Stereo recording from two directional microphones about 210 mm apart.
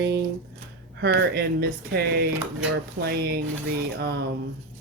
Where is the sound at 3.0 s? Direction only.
50° right (ahead or behind).